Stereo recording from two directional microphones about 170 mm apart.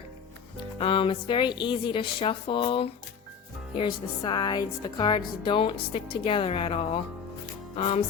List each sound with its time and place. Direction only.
0.8 s a woman's voice: 30° left (ahead or behind)